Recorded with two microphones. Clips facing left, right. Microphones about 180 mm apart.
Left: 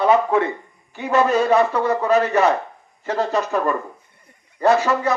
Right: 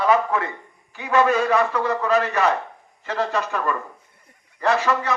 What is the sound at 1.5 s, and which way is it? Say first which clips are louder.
Speech: left 3 dB; 20° left (ahead or behind).